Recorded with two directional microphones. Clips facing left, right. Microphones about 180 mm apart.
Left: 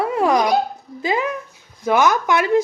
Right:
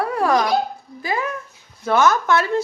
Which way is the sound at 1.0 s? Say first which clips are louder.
Left 3 dB; 20° left (ahead or behind).